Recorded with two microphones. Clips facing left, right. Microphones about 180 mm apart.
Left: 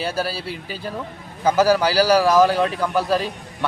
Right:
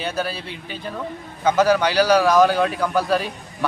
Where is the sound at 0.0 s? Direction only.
35° left (ahead or behind).